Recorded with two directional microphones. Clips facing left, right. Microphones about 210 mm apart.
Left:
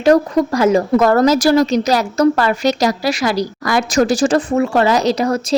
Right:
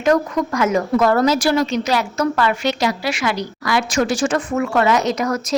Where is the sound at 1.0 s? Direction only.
45° left (ahead or behind).